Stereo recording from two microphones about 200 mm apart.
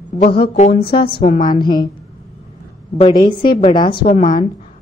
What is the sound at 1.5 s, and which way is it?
Speech, 20° left (ahead or behind).